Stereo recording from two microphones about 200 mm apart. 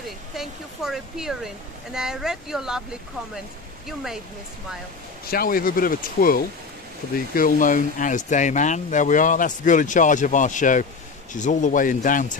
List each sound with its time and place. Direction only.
0.4 s speech: centre (ahead or behind)
5.3 s speech: 45° left (ahead or behind)